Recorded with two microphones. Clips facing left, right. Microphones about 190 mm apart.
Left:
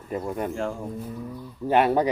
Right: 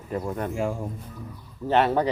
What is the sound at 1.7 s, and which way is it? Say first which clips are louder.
Speech: left 1 dB; 10° left (ahead or behind).